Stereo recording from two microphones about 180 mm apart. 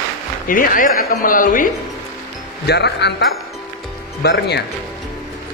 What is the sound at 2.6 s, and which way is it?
A man's voice, 65° left (ahead or behind).